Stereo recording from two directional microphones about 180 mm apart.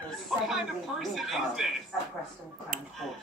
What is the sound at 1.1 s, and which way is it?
Speech, centre (ahead or behind).